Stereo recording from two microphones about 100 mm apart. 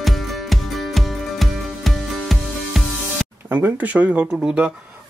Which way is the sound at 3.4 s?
20° right (ahead or behind).